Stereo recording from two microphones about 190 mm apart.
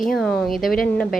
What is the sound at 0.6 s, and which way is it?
Speech, 50° left (ahead or behind).